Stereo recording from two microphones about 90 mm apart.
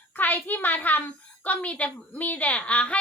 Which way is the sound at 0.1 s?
20° left (ahead or behind).